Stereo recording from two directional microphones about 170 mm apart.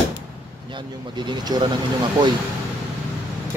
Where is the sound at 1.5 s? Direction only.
25° right (ahead or behind).